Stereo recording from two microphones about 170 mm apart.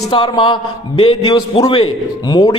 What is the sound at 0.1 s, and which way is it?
A man's voice, 30° left (ahead or behind).